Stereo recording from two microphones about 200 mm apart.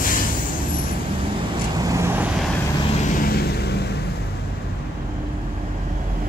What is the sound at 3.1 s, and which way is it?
Vehicle, 50° left (ahead or behind).